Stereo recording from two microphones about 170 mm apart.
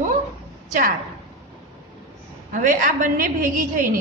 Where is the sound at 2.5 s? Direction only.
50° right (ahead or behind).